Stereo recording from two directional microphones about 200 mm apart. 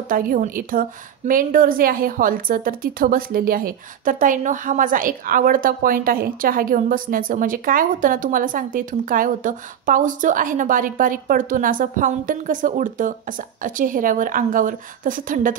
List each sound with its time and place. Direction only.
0.1 s a woman's voice: 45° right (ahead or behind)